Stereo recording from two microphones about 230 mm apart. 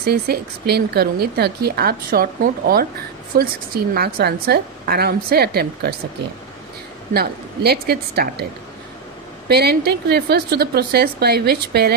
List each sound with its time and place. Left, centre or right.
0.0 s speech: right
7.1 s speech: right
9.5 s speech: right